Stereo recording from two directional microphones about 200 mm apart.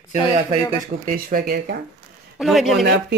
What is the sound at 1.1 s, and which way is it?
Speech, 45° right (ahead or behind).